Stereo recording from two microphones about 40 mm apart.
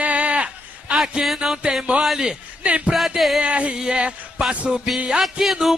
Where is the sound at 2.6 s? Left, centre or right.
Right.